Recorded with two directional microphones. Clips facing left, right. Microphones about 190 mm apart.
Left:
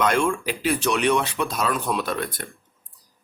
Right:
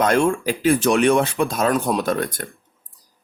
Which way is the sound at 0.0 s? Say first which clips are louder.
Right 4 dB; 45° right (ahead or behind).